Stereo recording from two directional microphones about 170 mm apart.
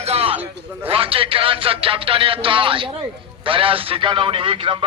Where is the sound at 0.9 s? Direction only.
35° right (ahead or behind).